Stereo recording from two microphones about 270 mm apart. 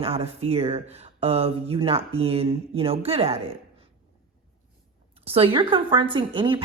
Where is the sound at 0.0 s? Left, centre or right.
Right.